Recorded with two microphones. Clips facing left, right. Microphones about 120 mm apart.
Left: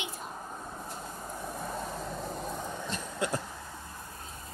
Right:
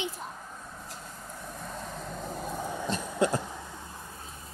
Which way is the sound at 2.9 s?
30° right (ahead or behind).